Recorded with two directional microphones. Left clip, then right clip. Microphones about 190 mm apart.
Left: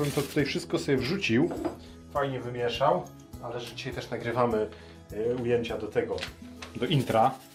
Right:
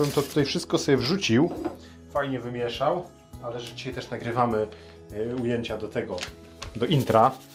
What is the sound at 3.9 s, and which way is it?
Speech, 35° right (ahead or behind).